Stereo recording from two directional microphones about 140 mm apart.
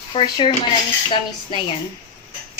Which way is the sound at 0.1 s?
35° left (ahead or behind).